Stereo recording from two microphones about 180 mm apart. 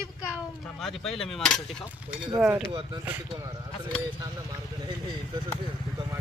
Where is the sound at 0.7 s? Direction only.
Centre (ahead or behind).